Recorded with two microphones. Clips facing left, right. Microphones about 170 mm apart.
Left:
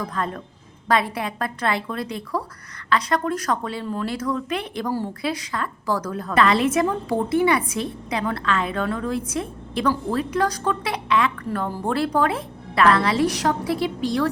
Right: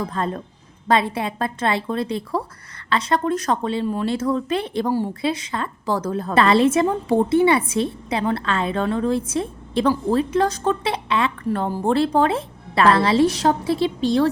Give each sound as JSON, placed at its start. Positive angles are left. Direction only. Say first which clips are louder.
{"t": 0.0, "sound": "a woman's voice", "louder": "right 3 dB", "side_deg": -30}